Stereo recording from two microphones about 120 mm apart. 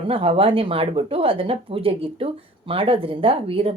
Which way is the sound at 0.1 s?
50° right (ahead or behind).